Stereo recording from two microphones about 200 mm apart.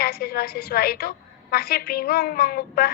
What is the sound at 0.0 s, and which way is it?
A woman's voice, 50° left (ahead or behind).